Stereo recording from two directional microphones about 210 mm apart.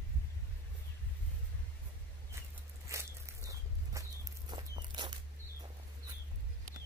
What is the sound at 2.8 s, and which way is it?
Walk, 15° right (ahead or behind).